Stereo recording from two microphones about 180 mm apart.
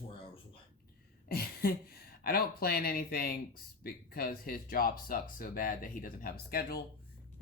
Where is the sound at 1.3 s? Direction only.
55° left (ahead or behind).